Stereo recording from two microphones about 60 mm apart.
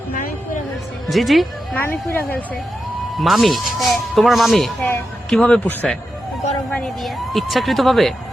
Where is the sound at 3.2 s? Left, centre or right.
Centre.